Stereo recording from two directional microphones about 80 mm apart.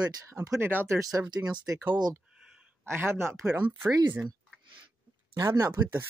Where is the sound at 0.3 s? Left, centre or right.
Right.